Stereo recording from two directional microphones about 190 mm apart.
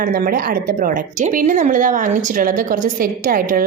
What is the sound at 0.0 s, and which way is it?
A woman's voice, 50° right (ahead or behind).